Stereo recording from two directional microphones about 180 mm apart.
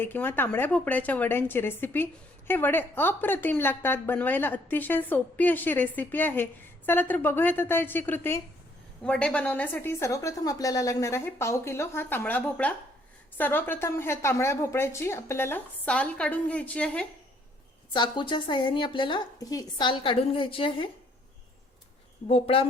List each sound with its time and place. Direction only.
0.0 s a woman's voice: 10° left (ahead or behind)
17.9 s a woman's voice: 25° left (ahead or behind)
22.3 s speech: 30° left (ahead or behind)